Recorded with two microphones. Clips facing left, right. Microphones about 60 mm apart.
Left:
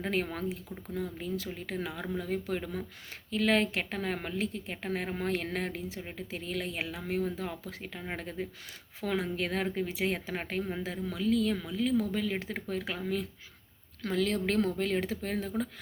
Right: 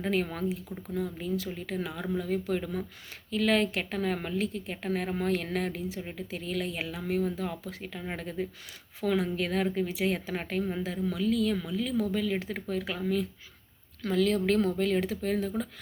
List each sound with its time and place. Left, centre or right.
0.0 s a woman's voice: left
6.0 s speech: centre
6.3 s a woman's voice: left
14.0 s a woman's voice: left